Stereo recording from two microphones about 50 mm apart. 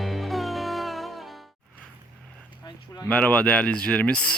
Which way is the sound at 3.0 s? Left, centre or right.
Left.